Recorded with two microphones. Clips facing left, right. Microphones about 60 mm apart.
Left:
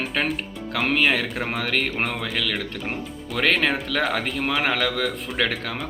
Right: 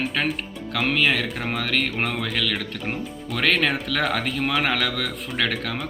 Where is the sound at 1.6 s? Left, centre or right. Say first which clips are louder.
Even; left.